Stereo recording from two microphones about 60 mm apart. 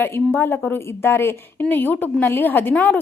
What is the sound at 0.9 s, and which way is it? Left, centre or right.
A woman's voice, left.